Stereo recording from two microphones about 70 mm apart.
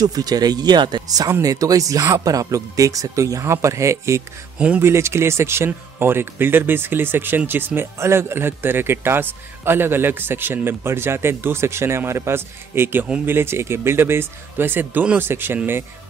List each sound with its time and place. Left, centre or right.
0.0 s speech: right
4.6 s speech: centre
4.8 s speech: right